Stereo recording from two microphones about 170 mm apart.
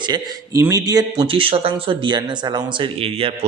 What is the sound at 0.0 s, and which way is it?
A man's voice, 25° right (ahead or behind).